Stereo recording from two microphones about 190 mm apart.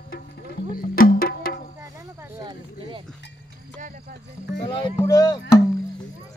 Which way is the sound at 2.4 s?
25° right (ahead or behind).